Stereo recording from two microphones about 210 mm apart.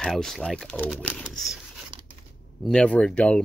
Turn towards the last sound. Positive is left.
turn(degrees=5)  # may be behind; listen again after turning